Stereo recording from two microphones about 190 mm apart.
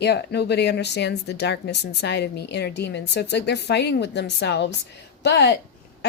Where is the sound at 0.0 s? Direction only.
60° left (ahead or behind).